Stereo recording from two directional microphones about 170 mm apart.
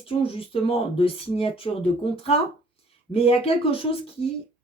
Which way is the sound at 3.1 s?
35° left (ahead or behind).